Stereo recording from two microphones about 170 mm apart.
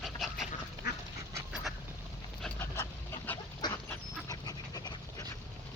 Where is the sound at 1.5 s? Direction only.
Centre (ahead or behind).